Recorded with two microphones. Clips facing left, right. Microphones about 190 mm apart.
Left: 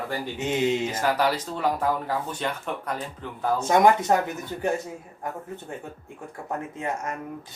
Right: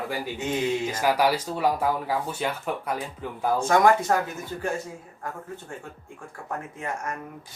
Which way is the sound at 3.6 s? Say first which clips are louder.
Left 1 dB; 20° left (ahead or behind).